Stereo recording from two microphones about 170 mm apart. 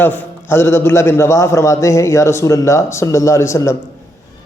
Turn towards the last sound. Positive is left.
turn(degrees=15)  # may be behind; listen again after turning